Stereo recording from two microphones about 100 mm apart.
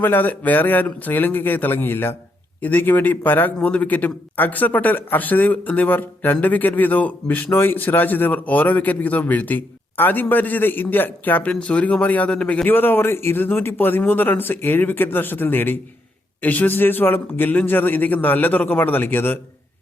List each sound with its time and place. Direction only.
0.0 s a man's voice: 20° left (ahead or behind)